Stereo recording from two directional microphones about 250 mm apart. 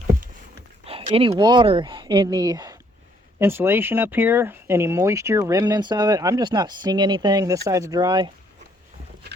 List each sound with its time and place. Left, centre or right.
0.9 s speech: right